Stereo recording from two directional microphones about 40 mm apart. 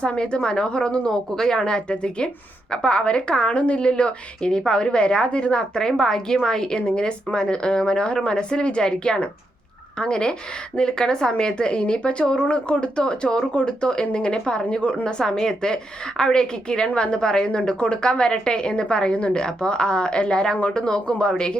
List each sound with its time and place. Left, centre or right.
0.2 s speech: left
6.0 s speech: centre
15.2 s speech: centre